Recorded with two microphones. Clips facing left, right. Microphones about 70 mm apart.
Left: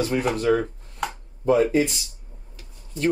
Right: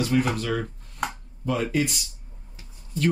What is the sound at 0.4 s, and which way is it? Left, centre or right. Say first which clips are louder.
Speech: left 7 dB; left.